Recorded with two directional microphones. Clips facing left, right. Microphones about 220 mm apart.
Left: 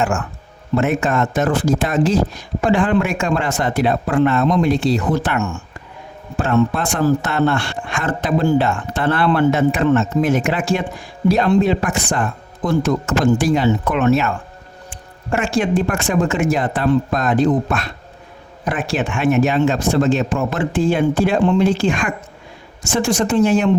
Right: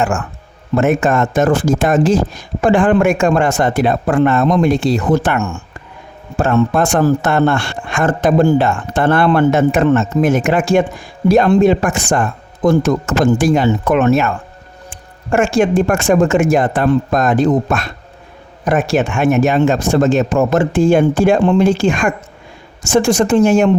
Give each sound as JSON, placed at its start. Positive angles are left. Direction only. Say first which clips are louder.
{"t": 0.8, "sound": "speech", "louder": "right 4 dB", "side_deg": -45}